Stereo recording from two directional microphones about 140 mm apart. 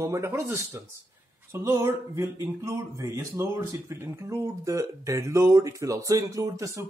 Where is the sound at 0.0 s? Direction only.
20° right (ahead or behind).